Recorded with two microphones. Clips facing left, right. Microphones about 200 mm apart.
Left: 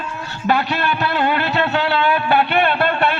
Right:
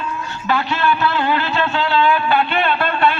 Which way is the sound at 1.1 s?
55° left (ahead or behind).